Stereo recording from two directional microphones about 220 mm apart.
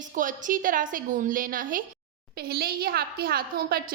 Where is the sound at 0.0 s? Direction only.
35° right (ahead or behind).